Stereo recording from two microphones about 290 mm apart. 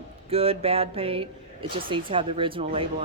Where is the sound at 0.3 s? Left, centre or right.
Centre.